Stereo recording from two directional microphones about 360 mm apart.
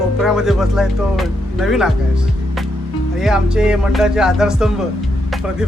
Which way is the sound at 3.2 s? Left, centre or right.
Centre.